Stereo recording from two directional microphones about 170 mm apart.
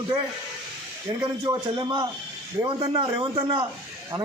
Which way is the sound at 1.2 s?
25° right (ahead or behind).